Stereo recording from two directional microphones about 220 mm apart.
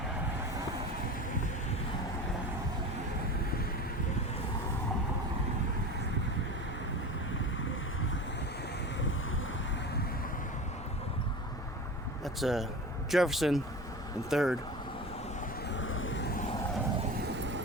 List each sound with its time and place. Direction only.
12.2 s speech: centre (ahead or behind)
15.7 s vehicle: 60° left (ahead or behind)
17.3 s vehicle: 55° right (ahead or behind)